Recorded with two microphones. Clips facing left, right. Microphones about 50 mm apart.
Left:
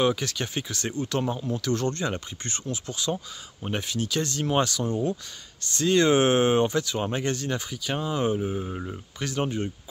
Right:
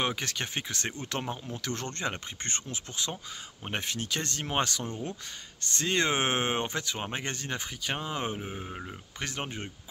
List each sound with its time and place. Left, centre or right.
0.0 s speech: right
9.2 s speech: right